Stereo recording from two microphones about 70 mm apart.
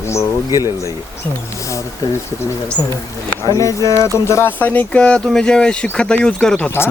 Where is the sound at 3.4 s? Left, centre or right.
Left; by 6.7 s centre.